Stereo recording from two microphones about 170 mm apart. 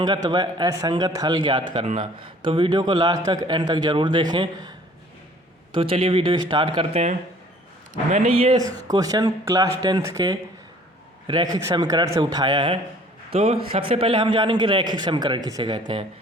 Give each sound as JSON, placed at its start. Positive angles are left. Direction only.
{"t": 0.0, "sound": "a man's voice", "side_deg": -25}
{"t": 5.7, "sound": "speech", "side_deg": -30}
{"t": 8.9, "sound": "a man's voice", "side_deg": -20}